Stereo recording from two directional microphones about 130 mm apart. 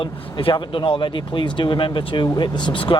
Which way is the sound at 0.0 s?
40° left (ahead or behind).